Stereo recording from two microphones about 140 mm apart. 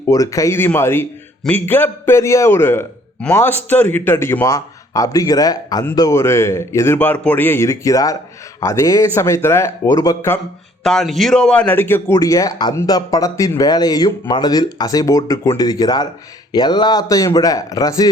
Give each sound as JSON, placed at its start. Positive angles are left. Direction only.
{"t": 0.1, "sound": "a man's voice", "side_deg": 25}
{"t": 10.8, "sound": "a man's voice", "side_deg": 5}